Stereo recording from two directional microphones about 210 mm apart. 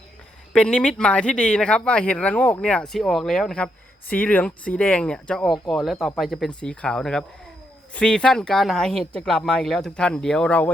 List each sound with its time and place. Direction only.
0.5 s speech: 5° left (ahead or behind)